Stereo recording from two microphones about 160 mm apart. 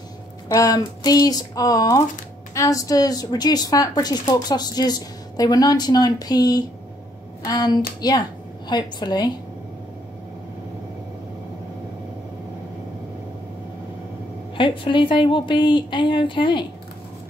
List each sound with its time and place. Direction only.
0.5 s speech: 20° left (ahead or behind)
14.6 s a woman's voice: 30° left (ahead or behind)